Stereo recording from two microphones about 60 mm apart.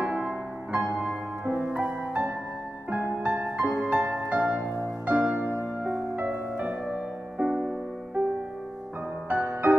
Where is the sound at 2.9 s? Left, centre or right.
Right.